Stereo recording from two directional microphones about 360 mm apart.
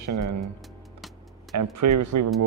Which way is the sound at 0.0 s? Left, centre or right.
Right.